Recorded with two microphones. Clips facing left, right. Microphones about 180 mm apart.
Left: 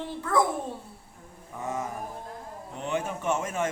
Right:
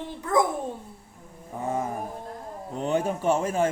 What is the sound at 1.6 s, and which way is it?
Speech, 35° right (ahead or behind).